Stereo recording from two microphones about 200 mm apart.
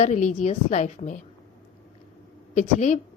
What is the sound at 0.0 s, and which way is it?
A woman's voice, 35° left (ahead or behind).